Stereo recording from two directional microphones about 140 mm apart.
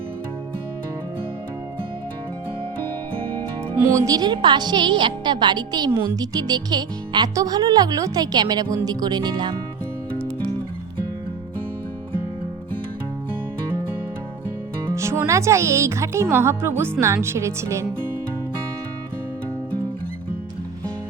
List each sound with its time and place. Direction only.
3.8 s a woman's voice: 20° right (ahead or behind)
14.9 s music: 20° right (ahead or behind)
15.3 s a woman's voice: 20° right (ahead or behind)